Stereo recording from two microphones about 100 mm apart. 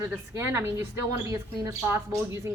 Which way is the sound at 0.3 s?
25° right (ahead or behind).